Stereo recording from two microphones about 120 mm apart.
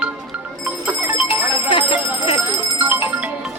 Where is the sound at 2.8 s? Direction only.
15° right (ahead or behind).